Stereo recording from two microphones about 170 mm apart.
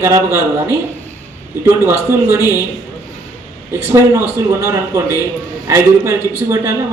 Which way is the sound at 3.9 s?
15° right (ahead or behind).